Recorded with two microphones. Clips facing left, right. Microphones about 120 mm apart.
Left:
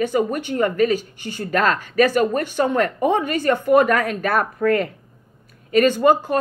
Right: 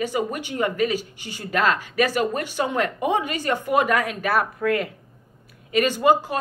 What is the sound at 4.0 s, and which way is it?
Speech, 45° left (ahead or behind).